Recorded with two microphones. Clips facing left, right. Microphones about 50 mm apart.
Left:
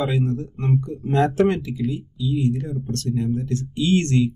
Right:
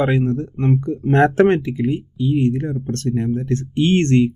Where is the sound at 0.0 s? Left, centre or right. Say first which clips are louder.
Right 5 dB; right.